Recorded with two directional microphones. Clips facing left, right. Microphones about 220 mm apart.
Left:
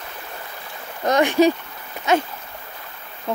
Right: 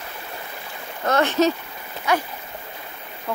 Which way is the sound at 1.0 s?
15° left (ahead or behind).